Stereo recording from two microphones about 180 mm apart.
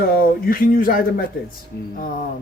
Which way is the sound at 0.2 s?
50° left (ahead or behind).